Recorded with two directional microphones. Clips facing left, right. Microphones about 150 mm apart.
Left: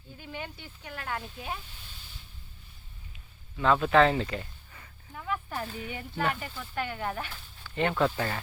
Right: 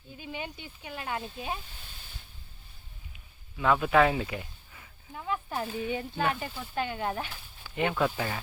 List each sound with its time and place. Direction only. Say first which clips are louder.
0.2 s speech: right 2 dB; 15° right (ahead or behind)
3.6 s speech: left 1 dB; 10° right (ahead or behind)
5.1 s speech: right 1 dB; 20° right (ahead or behind)